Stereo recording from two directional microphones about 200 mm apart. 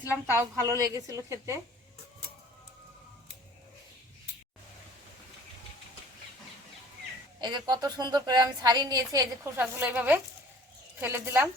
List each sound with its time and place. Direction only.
0.0 s a woman's voice: 10° right (ahead or behind)
7.4 s a woman's voice: 20° right (ahead or behind)